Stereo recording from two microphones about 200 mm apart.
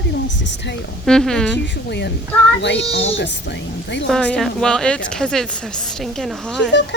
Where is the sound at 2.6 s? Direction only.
60° left (ahead or behind).